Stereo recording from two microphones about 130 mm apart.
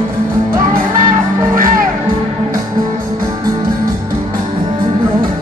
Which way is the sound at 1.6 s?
90° right.